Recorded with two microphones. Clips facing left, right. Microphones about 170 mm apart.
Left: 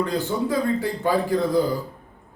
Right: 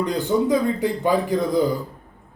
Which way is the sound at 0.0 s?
15° right (ahead or behind).